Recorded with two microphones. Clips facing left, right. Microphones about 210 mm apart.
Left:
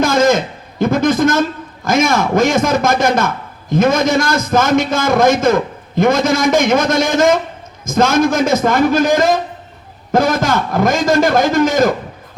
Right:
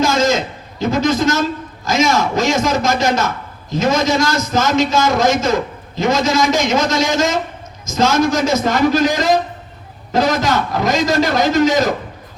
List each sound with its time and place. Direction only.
0.0 s a man's voice: 55° left (ahead or behind)